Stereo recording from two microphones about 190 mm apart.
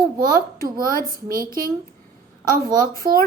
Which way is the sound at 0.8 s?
50° right (ahead or behind).